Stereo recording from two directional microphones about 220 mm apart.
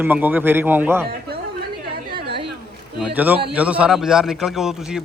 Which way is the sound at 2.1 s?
45° right (ahead or behind).